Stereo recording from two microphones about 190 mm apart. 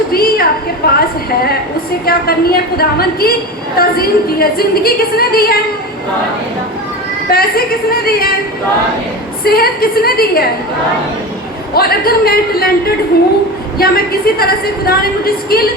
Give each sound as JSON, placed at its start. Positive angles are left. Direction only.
{"t": 0.1, "sound": "a sound", "side_deg": 50}
{"t": 0.8, "sound": "a woman's voice", "side_deg": 55}
{"t": 2.0, "sound": "a woman's voice", "side_deg": 55}
{"t": 7.3, "sound": "a woman's voice", "side_deg": 50}
{"t": 9.4, "sound": "a woman's voice", "side_deg": 55}
{"t": 11.7, "sound": "a woman's voice", "side_deg": 55}